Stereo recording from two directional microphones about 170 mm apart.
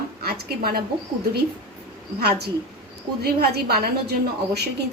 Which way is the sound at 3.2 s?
70° right (ahead or behind).